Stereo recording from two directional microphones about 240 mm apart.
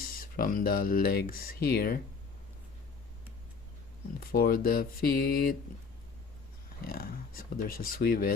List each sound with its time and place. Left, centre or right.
0.2 s speech: left
4.2 s speech: left
6.8 s speech: left